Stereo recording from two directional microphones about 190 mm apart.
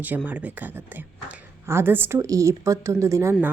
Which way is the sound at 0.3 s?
10° right (ahead or behind).